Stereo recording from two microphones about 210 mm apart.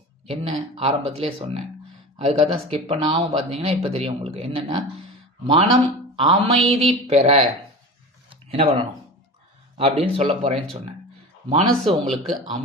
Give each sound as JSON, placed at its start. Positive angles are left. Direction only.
{"t": 0.3, "sound": "speech", "side_deg": -30}
{"t": 8.3, "sound": "a sound", "side_deg": -30}
{"t": 9.7, "sound": "speech", "side_deg": -30}
{"t": 11.8, "sound": "speech", "side_deg": 0}